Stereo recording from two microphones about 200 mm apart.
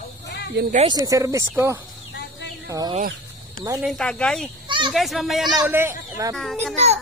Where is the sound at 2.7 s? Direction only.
20° right (ahead or behind).